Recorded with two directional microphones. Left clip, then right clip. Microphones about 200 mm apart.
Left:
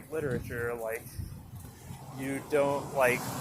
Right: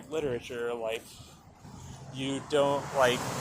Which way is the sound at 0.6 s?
10° right (ahead or behind).